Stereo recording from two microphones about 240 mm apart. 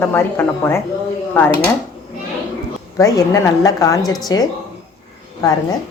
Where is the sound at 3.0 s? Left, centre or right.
Centre.